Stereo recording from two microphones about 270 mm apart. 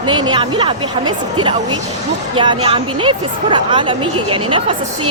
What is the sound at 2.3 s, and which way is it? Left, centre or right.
A woman's voice, centre.